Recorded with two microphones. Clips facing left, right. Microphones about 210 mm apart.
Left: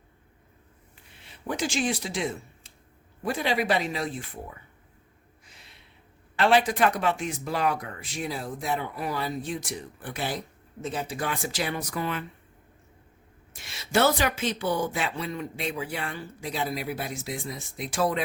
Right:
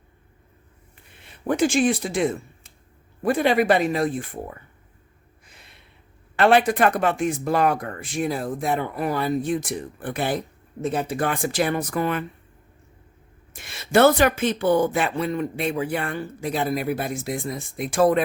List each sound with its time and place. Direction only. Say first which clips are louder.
1.1 s speech: right 8 dB; 55° right (ahead or behind)
5.5 s a sound: right 3 dB; 55° right (ahead or behind)
6.3 s speech: right 5 dB; 55° right (ahead or behind)
13.5 s speech: right 6 dB; 55° right (ahead or behind)